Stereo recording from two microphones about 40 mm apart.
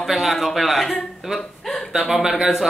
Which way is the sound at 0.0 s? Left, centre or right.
Centre.